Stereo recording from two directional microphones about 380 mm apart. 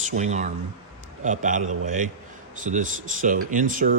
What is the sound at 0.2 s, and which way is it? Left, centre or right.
Speech, centre.